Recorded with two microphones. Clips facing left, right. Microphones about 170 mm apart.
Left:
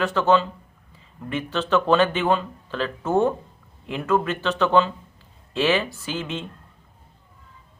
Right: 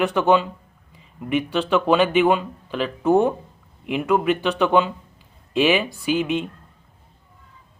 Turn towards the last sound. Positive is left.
turn(degrees=-15)  # may be behind; listen again after turning